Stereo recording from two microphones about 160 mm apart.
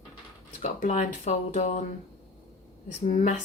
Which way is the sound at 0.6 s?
50° left (ahead or behind).